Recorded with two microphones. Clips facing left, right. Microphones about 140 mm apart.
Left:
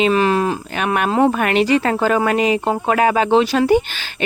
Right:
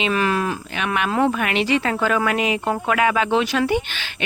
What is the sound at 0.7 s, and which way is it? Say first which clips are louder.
Speech: left 4 dB; 45° left (ahead or behind).